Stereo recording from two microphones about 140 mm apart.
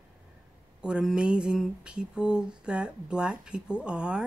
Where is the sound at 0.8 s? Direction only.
5° right (ahead or behind).